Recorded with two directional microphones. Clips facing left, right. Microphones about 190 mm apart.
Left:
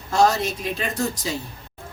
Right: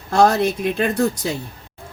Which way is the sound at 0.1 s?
55° right (ahead or behind).